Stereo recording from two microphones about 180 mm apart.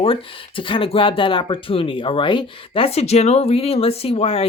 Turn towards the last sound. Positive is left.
turn(degrees=30)  # may be behind; listen again after turning